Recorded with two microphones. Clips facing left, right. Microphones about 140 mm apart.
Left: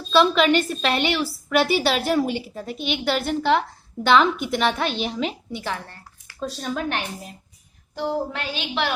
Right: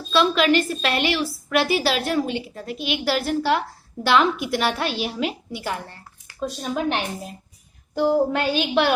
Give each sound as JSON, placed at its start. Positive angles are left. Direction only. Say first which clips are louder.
{"t": 0.1, "sound": "a woman's voice", "louder": "left 1 dB", "side_deg": 0}
{"t": 7.9, "sound": "a woman's voice", "louder": "right 7 dB", "side_deg": -50}